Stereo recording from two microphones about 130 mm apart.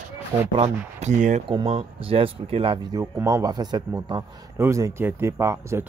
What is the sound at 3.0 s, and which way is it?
Speech, 25° right (ahead or behind).